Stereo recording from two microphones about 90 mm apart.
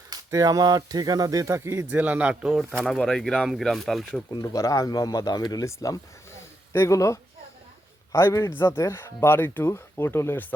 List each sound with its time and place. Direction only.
0.3 s speech: 40° right (ahead or behind)
1.9 s a man's voice: 15° right (ahead or behind)
2.5 s speech: 5° left (ahead or behind)
4.3 s a man's voice: 40° left (ahead or behind)